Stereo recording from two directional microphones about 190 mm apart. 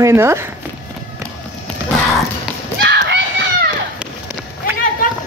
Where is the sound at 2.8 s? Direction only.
65° right (ahead or behind).